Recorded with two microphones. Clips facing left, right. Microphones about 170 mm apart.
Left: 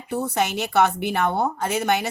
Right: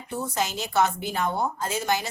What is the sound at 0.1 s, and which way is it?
A woman's voice, 60° left (ahead or behind).